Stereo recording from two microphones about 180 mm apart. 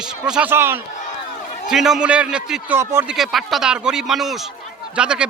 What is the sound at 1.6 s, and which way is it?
Speech, centre (ahead or behind).